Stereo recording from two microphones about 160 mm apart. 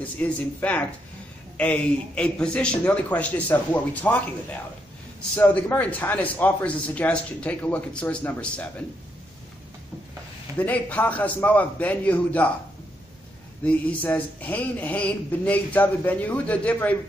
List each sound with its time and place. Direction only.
0.0 s a man's voice: 10° left (ahead or behind)
10.6 s a man's voice: 10° left (ahead or behind)
13.7 s a man's voice: 10° left (ahead or behind)